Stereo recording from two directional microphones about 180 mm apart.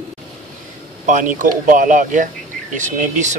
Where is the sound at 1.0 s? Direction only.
45° right (ahead or behind).